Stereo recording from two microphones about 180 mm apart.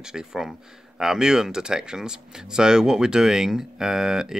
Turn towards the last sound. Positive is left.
turn(degrees=-5)  # may be behind; listen again after turning